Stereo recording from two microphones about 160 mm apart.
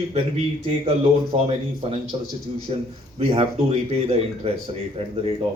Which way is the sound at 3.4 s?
35° right (ahead or behind).